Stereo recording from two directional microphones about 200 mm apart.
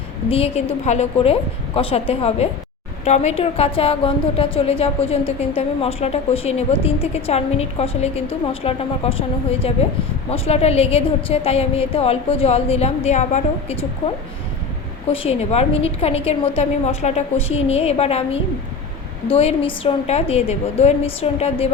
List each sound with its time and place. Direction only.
0.3 s a woman's voice: 30° left (ahead or behind)
15.1 s a woman's voice: 30° left (ahead or behind)